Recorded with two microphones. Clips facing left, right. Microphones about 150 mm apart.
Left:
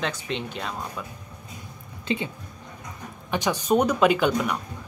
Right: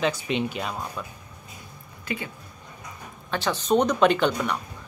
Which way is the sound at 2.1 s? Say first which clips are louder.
Left 5 dB; 25° left (ahead or behind).